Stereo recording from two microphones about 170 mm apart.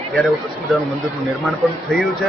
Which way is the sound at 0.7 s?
Centre (ahead or behind).